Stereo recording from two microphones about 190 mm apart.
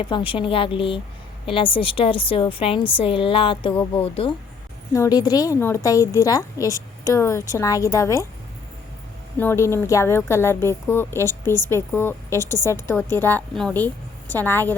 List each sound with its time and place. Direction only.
0.0 s a woman's voice: 25° left (ahead or behind)
4.9 s speech: 20° left (ahead or behind)
9.4 s speech: 15° left (ahead or behind)